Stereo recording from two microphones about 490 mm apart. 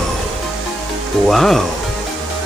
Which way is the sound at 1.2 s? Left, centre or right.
Centre.